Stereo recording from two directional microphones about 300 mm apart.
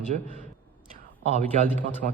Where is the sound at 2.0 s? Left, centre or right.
Right.